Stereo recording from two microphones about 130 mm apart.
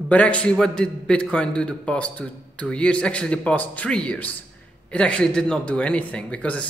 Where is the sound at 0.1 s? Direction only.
10° left (ahead or behind).